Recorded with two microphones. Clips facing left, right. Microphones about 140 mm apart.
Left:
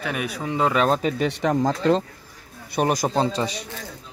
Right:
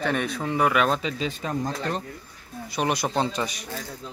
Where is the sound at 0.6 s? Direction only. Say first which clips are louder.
Left 1 dB; 25° left (ahead or behind).